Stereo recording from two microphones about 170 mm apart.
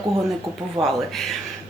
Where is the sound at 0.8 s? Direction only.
30° right (ahead or behind).